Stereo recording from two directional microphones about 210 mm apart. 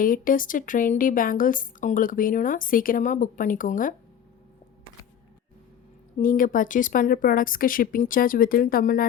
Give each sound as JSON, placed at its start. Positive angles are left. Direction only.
{"t": 0.0, "sound": "a woman's voice", "side_deg": 40}
{"t": 6.1, "sound": "a woman's voice", "side_deg": 40}